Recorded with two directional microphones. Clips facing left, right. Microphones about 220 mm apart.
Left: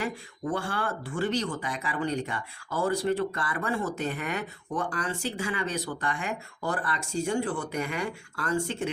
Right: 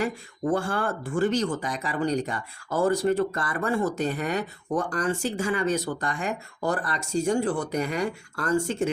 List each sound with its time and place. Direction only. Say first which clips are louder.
0.5 s speech: right 4 dB; 45° right (ahead or behind)